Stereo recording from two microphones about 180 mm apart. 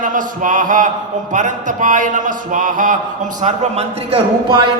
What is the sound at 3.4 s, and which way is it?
A man's voice, 40° right (ahead or behind).